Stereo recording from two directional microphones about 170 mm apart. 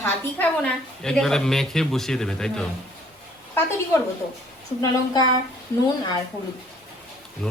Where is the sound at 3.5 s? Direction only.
15° left (ahead or behind).